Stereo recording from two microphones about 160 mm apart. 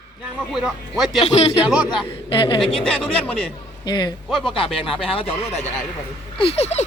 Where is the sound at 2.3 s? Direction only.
35° left (ahead or behind).